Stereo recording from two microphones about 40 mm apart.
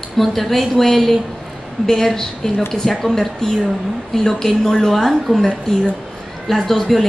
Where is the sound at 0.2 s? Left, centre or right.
Centre.